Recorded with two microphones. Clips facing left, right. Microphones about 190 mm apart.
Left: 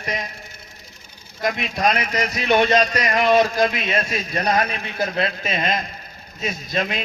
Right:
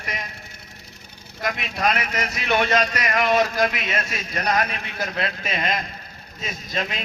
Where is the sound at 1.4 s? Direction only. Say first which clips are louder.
Left 3 dB; 40° left (ahead or behind).